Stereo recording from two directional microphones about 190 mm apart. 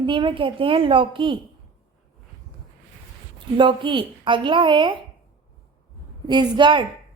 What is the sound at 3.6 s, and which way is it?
A woman's voice, 25° right (ahead or behind).